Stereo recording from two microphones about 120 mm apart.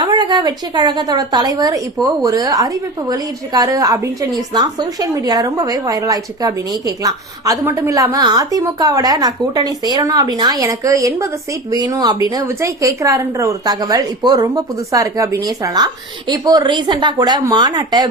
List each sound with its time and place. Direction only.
0.0 s a woman's voice: 35° right (ahead or behind)